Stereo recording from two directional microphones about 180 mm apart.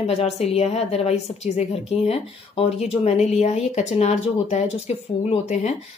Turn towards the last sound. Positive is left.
turn(degrees=35)  # may be behind; listen again after turning